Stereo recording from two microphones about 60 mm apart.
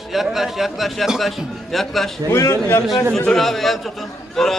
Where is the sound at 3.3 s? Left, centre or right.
Centre.